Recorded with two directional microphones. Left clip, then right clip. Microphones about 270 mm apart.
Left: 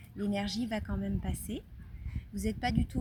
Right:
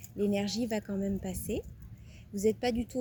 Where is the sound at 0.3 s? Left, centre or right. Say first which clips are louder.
Right 2 dB; centre.